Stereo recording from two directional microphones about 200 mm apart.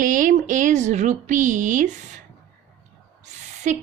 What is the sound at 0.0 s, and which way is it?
Speech, 40° right (ahead or behind).